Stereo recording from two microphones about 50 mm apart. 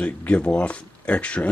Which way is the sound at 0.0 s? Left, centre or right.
Left.